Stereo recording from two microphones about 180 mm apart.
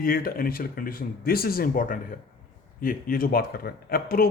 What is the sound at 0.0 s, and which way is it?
A man's voice, 55° left (ahead or behind).